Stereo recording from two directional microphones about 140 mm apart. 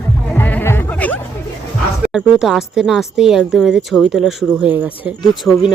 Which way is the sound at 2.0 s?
5° right (ahead or behind).